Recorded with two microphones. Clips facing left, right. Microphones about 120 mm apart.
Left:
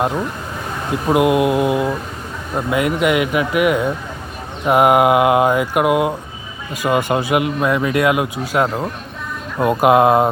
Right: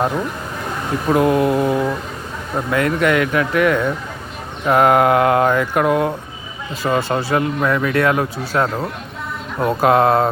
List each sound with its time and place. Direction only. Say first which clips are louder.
1.0 s speech: left 1 dB; 15° left (ahead or behind)